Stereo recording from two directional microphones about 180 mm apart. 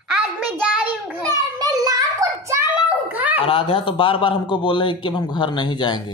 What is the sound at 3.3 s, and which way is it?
A man's voice, 30° left (ahead or behind).